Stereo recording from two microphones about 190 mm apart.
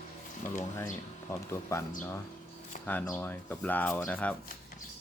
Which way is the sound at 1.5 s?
15° left (ahead or behind).